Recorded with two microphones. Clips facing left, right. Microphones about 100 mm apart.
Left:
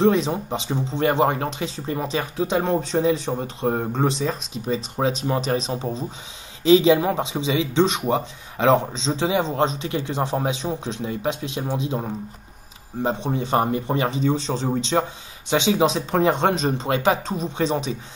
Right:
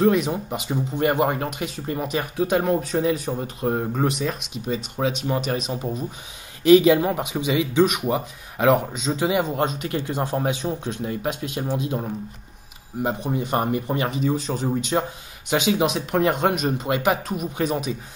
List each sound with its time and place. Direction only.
0.0 s speech: 30° left (ahead or behind)